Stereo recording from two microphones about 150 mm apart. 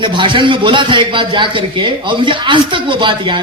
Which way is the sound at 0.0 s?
30° right (ahead or behind).